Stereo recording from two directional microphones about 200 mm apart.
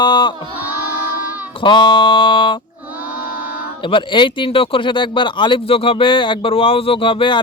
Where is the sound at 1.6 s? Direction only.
25° left (ahead or behind).